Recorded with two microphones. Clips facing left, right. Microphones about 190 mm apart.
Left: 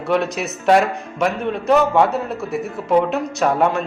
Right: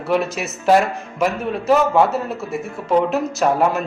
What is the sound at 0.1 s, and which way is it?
Speech, centre (ahead or behind).